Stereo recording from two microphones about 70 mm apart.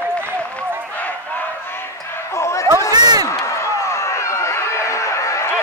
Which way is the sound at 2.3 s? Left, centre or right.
Left.